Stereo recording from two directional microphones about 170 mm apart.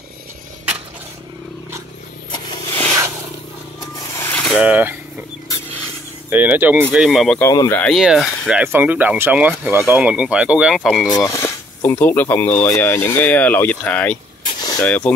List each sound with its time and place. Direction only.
2.3 s a sound: 25° left (ahead or behind)
4.2 s vehicle: 10° left (ahead or behind)
4.6 s speech: 10° right (ahead or behind)
6.3 s speech: 10° right (ahead or behind)
7.3 s speech: 20° left (ahead or behind)
7.8 s speech: centre (ahead or behind)
11.1 s speech: 20° left (ahead or behind)
14.6 s vehicle: 25° left (ahead or behind)
14.9 s speech: 5° left (ahead or behind)